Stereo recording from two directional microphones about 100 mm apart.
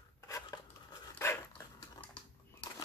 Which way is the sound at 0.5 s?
35° left (ahead or behind).